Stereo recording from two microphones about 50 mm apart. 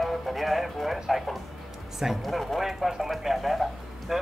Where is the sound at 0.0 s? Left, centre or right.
Centre.